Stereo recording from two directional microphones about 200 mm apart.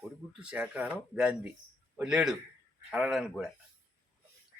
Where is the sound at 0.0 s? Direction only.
5° right (ahead or behind).